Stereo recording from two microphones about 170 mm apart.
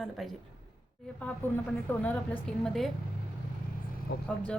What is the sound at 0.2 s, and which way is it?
Speech, centre (ahead or behind).